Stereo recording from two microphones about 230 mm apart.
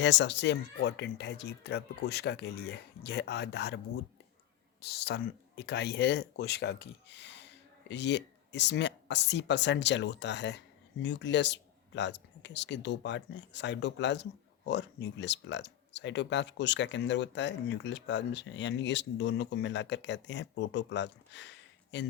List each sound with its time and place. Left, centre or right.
0.0 s speech: left
4.8 s speech: left